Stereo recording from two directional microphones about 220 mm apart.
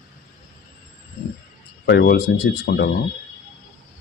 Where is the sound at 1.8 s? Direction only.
50° left (ahead or behind).